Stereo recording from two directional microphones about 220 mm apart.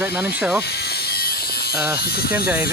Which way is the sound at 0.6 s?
45° left (ahead or behind).